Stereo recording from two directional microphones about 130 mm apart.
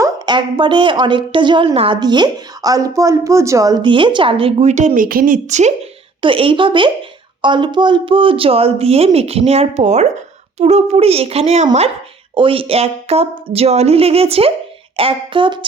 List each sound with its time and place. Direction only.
0.3 s a woman's voice: 35° right (ahead or behind)
2.0 s a woman's voice: 35° right (ahead or behind)
3.8 s a woman's voice: 40° right (ahead or behind)
4.7 s speech: 65° right (ahead or behind)
6.2 s a woman's voice: 40° right (ahead or behind); by 11.9 s 60° right (ahead or behind)
12.3 s a woman's voice: 40° right (ahead or behind)